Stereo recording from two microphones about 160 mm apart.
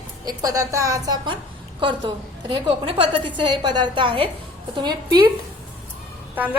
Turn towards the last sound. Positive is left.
turn(degrees=-10)  # may be behind; listen again after turning